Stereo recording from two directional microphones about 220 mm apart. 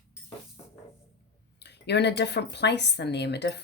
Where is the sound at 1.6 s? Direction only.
50° left (ahead or behind).